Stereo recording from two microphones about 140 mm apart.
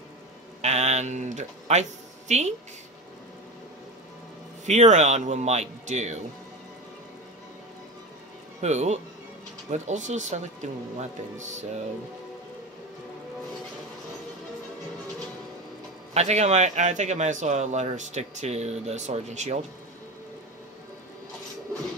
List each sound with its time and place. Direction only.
0.6 s speech: 55° right (ahead or behind)
4.6 s speech: 55° right (ahead or behind)
8.5 s speech: 55° right (ahead or behind)
16.1 s speech: 50° right (ahead or behind)